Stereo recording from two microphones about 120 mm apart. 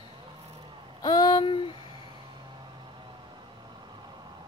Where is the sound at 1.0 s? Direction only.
35° left (ahead or behind).